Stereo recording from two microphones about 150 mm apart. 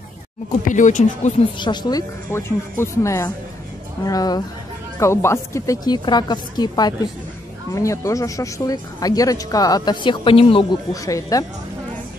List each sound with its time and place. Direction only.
0.7 s speech: 55° left (ahead or behind)
1.6 s speech: 30° left (ahead or behind)
10.9 s speech: 20° left (ahead or behind)